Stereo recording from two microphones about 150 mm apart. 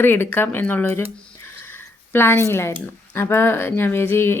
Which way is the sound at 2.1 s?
15° left (ahead or behind).